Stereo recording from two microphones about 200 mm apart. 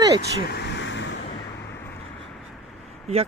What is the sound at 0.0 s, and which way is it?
Speech, 20° right (ahead or behind).